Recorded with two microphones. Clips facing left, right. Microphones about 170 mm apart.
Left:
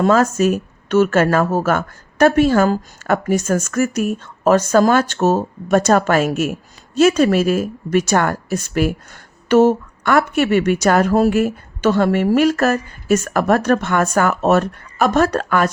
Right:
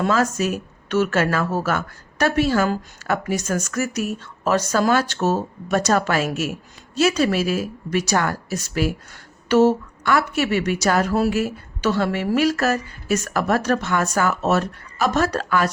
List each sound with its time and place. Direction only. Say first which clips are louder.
0.0 s speech: left 6 dB; 50° left (ahead or behind)